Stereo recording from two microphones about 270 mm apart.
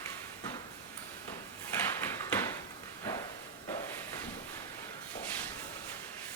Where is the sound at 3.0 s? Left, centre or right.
Centre.